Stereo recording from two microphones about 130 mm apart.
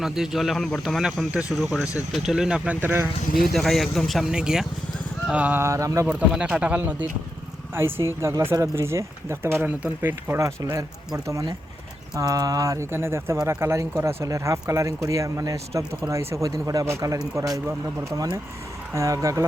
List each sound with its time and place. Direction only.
0.0 s speech: 5° right (ahead or behind)
2.8 s speech: 20° right (ahead or behind)
3.4 s speech: centre (ahead or behind); by 6.1 s 25° right (ahead or behind)
6.1 s speech: 10° right (ahead or behind); by 19.5 s 25° right (ahead or behind)